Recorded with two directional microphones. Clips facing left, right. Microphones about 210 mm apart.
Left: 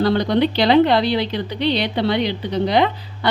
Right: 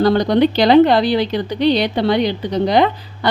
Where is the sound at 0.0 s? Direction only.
45° right (ahead or behind).